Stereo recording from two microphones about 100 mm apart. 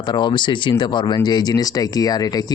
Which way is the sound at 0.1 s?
50° left (ahead or behind).